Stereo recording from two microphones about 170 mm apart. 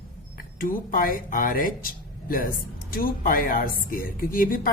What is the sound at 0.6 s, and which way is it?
A woman's voice, 55° left (ahead or behind).